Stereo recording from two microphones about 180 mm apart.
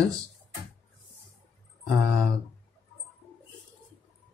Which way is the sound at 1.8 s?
5° left (ahead or behind).